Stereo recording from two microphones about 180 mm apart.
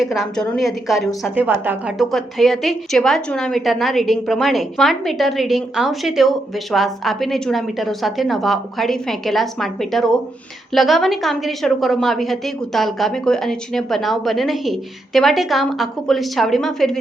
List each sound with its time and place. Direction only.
0.0 s a woman's voice: centre (ahead or behind)
2.1 s a woman's voice: centre (ahead or behind)